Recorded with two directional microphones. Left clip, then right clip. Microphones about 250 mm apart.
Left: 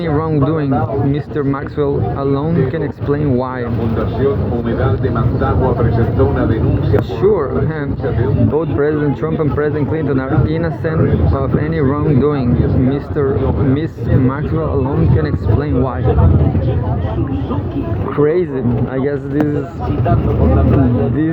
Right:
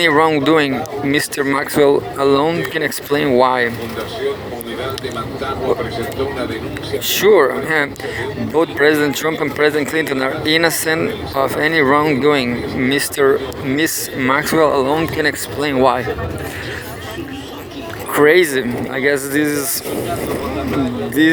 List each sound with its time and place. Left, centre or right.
0.0 s speech: right
7.2 s speech: right
18.2 s speech: right